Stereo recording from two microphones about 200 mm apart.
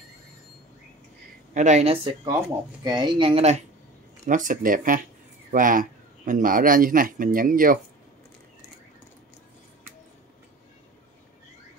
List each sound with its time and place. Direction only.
1.5 s a woman's voice: 35° right (ahead or behind)
2.2 s speech: 20° right (ahead or behind)
4.3 s a man's voice: 40° right (ahead or behind)